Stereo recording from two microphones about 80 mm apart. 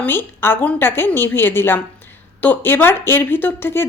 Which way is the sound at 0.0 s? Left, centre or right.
Left.